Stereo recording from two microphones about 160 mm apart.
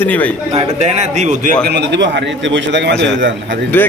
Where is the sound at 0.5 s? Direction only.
45° right (ahead or behind).